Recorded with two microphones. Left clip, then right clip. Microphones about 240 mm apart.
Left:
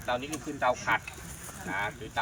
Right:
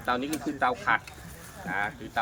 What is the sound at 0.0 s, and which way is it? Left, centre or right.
Speech, centre.